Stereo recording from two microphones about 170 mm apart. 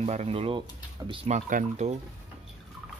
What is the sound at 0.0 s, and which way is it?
Speech, 40° right (ahead or behind).